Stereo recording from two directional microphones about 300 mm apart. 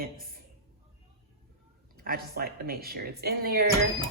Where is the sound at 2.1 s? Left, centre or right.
Right.